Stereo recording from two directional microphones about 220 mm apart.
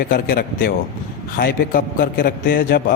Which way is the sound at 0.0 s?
45° left (ahead or behind).